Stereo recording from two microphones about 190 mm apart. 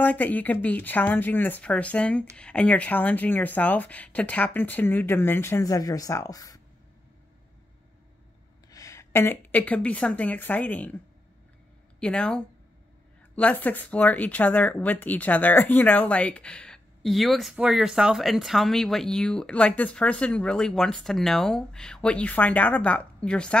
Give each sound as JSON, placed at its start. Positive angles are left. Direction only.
{"t": 0.0, "sound": "speech", "side_deg": 10}
{"t": 8.6, "sound": "speech", "side_deg": 15}
{"t": 12.0, "sound": "speech", "side_deg": 5}